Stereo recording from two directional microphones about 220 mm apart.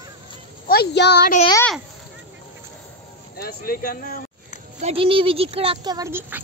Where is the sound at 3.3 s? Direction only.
45° left (ahead or behind).